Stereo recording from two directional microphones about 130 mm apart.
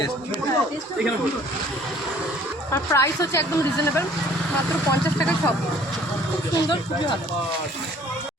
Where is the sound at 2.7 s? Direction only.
20° left (ahead or behind).